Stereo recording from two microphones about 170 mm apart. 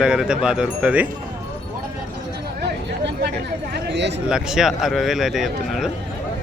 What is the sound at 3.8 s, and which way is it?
Speech, 90° right.